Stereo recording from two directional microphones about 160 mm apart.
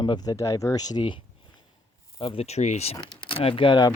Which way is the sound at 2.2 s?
35° left (ahead or behind).